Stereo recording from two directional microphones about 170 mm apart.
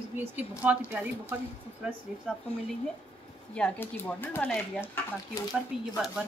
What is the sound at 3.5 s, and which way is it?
Speech, 10° left (ahead or behind).